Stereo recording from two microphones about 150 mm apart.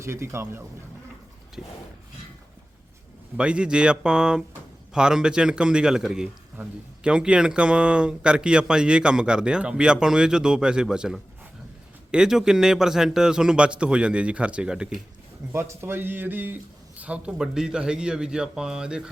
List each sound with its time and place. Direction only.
0.0 s speech: 20° right (ahead or behind)
1.6 s a man's voice: 5° right (ahead or behind)
3.3 s a man's voice: 5° right (ahead or behind)
15.5 s a man's voice: 20° right (ahead or behind)